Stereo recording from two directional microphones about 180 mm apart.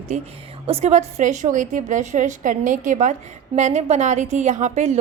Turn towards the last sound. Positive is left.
turn(degrees=-40)  # may be behind; listen again after turning